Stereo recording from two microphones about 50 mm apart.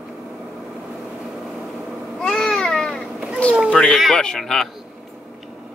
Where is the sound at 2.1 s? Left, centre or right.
Centre.